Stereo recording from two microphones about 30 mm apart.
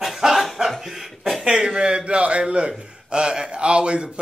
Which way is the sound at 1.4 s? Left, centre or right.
Right.